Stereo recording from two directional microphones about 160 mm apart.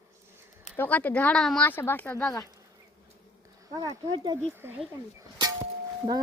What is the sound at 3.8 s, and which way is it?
Speech, 25° right (ahead or behind).